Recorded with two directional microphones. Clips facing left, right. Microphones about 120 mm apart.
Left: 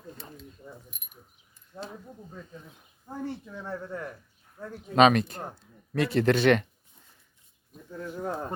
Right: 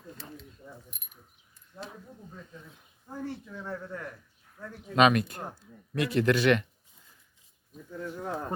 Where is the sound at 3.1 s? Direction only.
25° left (ahead or behind).